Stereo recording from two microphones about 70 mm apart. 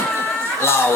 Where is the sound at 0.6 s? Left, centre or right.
Left.